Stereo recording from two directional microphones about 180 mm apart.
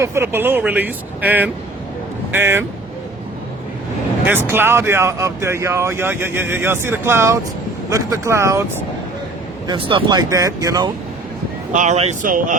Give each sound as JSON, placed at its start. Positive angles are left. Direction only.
{"t": 0.0, "sound": "speech", "side_deg": -15}
{"t": 4.3, "sound": "speech", "side_deg": -10}
{"t": 9.6, "sound": "speech", "side_deg": -25}
{"t": 11.7, "sound": "speech", "side_deg": -40}